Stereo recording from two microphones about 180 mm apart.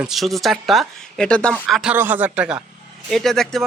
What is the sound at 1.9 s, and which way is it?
Speech, 10° right (ahead or behind).